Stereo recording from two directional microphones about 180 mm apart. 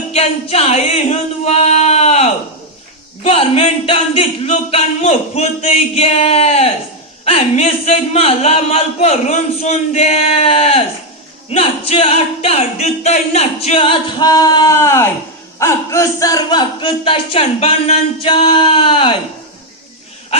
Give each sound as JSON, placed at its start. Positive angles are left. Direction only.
{"t": 0.1, "sound": "male singing", "side_deg": 35}
{"t": 3.2, "sound": "speech", "side_deg": 30}